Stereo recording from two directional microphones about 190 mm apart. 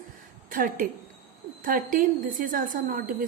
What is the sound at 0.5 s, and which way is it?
A woman's voice, 50° right (ahead or behind).